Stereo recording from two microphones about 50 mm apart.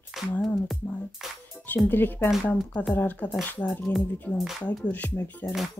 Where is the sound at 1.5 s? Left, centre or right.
Left.